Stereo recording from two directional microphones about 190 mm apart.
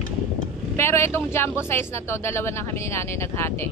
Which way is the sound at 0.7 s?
15° left (ahead or behind).